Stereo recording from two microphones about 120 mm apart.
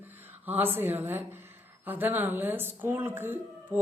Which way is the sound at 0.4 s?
15° right (ahead or behind).